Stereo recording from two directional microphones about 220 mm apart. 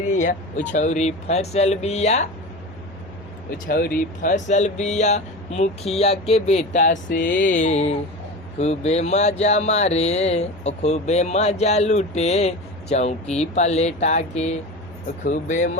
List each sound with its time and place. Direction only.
0.1 s speech: 35° left (ahead or behind)
3.7 s speech: 40° left (ahead or behind)